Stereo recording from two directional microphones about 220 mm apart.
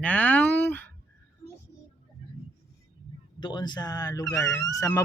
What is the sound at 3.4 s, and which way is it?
Speech, 20° left (ahead or behind).